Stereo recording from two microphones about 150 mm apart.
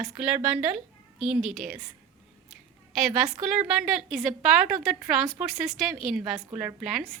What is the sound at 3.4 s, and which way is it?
A woman's voice, 5° right (ahead or behind).